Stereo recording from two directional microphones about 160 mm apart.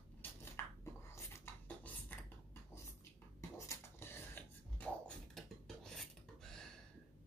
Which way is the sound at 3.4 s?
20° left (ahead or behind).